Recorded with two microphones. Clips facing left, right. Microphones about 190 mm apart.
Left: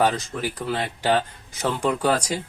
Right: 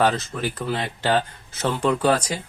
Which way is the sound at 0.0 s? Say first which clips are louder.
Right 1 dB; 10° left (ahead or behind).